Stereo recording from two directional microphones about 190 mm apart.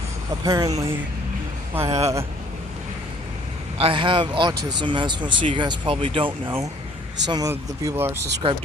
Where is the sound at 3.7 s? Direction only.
30° right (ahead or behind); by 8.2 s 10° right (ahead or behind).